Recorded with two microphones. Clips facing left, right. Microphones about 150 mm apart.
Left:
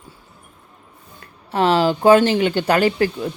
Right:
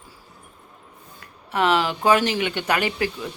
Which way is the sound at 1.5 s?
30° left (ahead or behind).